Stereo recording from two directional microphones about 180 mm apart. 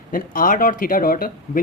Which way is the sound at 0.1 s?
50° left (ahead or behind).